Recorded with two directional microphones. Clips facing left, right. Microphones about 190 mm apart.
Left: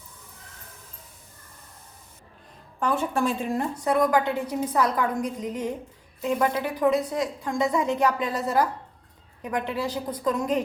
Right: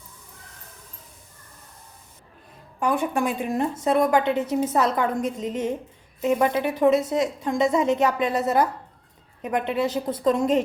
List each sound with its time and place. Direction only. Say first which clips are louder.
2.8 s a woman's voice: right 1 dB; 15° right (ahead or behind)